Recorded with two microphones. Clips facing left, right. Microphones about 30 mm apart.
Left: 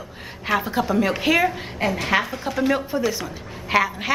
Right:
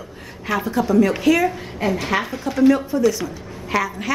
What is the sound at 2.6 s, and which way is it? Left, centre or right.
A woman's voice, centre.